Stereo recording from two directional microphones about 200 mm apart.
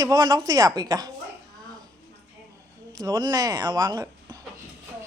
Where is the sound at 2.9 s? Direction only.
20° right (ahead or behind).